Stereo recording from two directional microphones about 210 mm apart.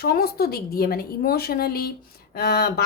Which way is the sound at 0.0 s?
45° left (ahead or behind).